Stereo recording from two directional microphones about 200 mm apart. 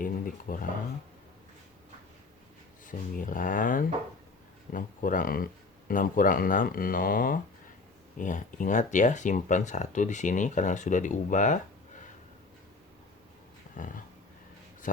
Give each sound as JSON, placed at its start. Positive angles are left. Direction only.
{"t": 0.0, "sound": "speech", "side_deg": 45}
{"t": 2.8, "sound": "speech", "side_deg": 40}